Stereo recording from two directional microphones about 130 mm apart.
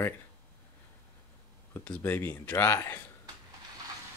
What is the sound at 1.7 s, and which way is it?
Speech, 15° left (ahead or behind).